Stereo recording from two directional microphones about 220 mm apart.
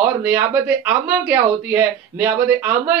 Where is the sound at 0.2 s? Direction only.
10° right (ahead or behind).